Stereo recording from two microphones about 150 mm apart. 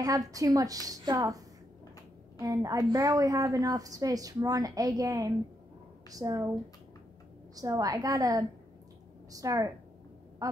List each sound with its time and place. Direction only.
0.0 s a woman's voice: 25° right (ahead or behind)
7.5 s a woman's voice: 25° right (ahead or behind)
10.4 s a sound: 25° right (ahead or behind)